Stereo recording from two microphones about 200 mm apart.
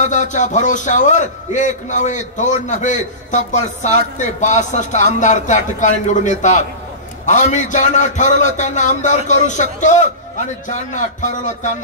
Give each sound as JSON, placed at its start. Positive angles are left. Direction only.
{"t": 0.0, "sound": "a man's voice", "side_deg": 40}